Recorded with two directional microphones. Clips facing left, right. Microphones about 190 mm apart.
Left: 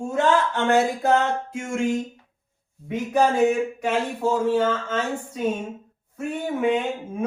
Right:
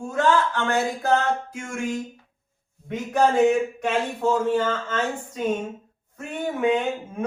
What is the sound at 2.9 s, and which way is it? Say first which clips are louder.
A man's voice: even; 10° left (ahead or behind).